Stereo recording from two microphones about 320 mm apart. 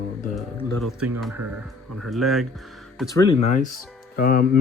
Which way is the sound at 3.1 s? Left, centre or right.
Centre.